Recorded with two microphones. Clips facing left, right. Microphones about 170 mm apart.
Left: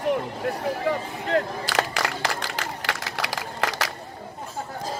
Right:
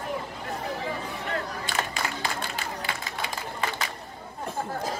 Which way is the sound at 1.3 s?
75° left (ahead or behind).